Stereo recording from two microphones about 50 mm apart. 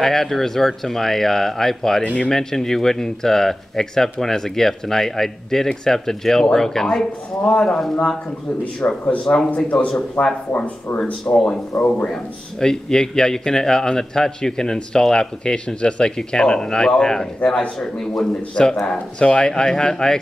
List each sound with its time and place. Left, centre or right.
0.0 s speech: centre
8.8 s speech: left
9.2 s speech: centre
10.2 s speech: left
12.1 s speech: centre
17.7 s speech: centre